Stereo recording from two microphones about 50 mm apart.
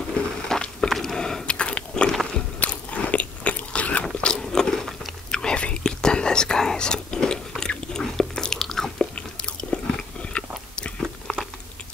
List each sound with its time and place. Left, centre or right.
0.4 s walk: centre
0.9 s biting: centre
2.0 s biting: centre
2.6 s biting: left
4.2 s biting: centre
5.3 s whispering: centre
8.4 s chewing: centre
9.1 s biting: centre
11.3 s biting: centre